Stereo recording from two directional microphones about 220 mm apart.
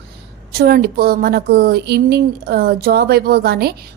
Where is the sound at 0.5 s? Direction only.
45° right (ahead or behind).